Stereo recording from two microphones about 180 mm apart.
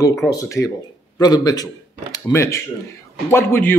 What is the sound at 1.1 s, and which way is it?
Speech, 20° left (ahead or behind).